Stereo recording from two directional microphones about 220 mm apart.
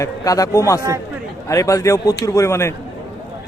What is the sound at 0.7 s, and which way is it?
Speech, 15° right (ahead or behind).